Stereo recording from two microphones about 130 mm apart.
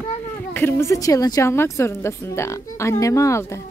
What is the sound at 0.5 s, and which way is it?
A woman's voice, 15° left (ahead or behind).